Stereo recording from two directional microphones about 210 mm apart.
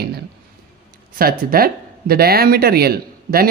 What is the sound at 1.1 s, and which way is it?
Speech, 45° right (ahead or behind).